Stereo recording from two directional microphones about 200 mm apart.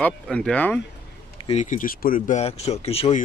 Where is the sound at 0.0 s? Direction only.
5° left (ahead or behind).